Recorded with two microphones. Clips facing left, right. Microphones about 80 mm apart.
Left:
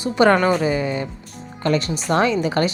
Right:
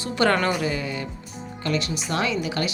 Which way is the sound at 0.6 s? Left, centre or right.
Left.